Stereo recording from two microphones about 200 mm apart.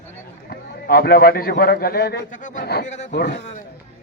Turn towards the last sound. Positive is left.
turn(degrees=55)  # may be behind; listen again after turning